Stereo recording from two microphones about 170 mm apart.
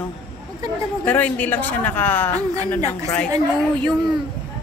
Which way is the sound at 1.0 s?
10° left (ahead or behind).